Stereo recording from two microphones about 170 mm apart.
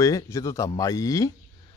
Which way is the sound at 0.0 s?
20° left (ahead or behind).